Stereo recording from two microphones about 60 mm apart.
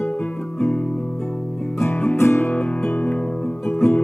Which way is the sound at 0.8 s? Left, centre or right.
Centre.